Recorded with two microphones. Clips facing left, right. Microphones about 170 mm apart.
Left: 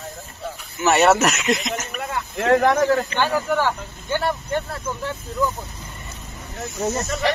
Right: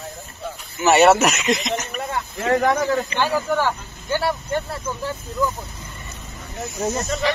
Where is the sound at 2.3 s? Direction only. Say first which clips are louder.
Left 3 dB; 65° left (ahead or behind).